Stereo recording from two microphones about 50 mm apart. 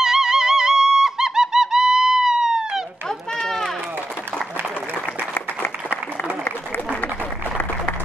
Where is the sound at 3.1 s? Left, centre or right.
Centre.